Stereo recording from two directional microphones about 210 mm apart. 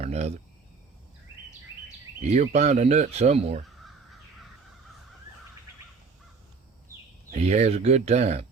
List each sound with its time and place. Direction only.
0.0 s speech: 30° right (ahead or behind)
2.2 s speech: 35° right (ahead or behind)
7.3 s speech: 30° right (ahead or behind)